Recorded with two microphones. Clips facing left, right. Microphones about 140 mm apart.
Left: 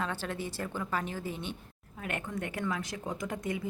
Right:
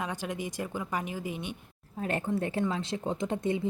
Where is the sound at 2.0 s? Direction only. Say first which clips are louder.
Right 6 dB; 30° right (ahead or behind).